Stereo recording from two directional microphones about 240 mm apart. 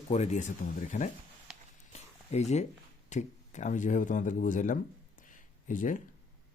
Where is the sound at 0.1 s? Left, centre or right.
Left.